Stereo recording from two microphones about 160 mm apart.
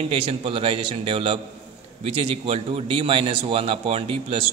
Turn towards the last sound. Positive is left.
turn(degrees=-35)  # may be behind; listen again after turning